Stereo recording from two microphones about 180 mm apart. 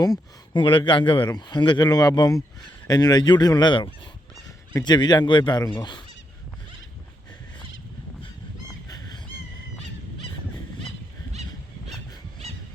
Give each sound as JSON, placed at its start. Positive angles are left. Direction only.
{"t": 0.0, "sound": "speech", "side_deg": 25}
{"t": 8.9, "sound": "fowl", "side_deg": 20}